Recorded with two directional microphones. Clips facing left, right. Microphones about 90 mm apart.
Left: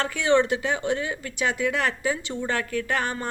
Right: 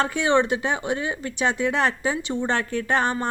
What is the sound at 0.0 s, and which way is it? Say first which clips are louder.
A woman's voice: right 1 dB; 20° right (ahead or behind).